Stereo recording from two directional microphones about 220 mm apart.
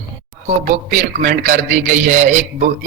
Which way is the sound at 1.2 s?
35° right (ahead or behind).